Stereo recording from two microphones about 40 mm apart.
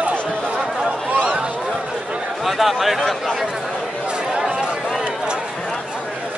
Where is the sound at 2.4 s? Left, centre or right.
Centre.